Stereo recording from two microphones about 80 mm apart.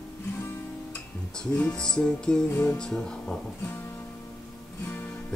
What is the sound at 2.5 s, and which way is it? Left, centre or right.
Music, left.